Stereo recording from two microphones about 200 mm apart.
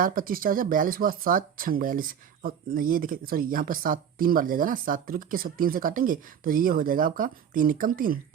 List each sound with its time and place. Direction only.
0.0 s speech: 45° right (ahead or behind)